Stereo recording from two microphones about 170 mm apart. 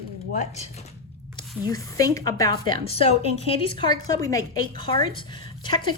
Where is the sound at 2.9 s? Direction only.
35° left (ahead or behind).